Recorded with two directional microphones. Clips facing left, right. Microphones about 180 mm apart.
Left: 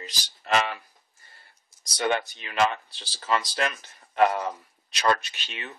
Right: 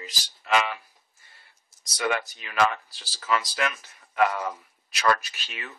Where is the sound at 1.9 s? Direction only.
30° left (ahead or behind).